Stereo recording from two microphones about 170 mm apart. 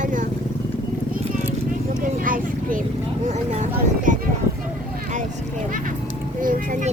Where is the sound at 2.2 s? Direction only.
50° right (ahead or behind).